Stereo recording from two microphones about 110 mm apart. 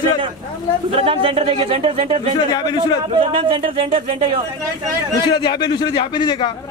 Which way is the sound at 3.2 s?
55° right (ahead or behind).